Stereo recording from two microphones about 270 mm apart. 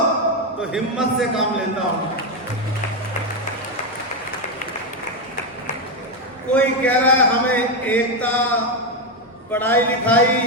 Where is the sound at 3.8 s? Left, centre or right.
Left.